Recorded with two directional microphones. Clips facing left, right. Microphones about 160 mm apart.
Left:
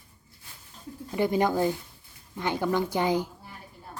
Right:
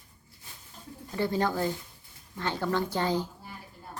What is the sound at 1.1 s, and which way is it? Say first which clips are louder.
Speech: left 4 dB; 15° left (ahead or behind).